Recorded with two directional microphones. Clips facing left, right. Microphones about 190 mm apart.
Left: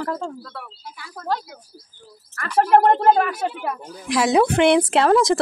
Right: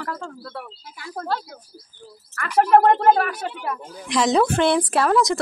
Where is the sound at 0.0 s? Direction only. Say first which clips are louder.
Left 5 dB; 15° left (ahead or behind).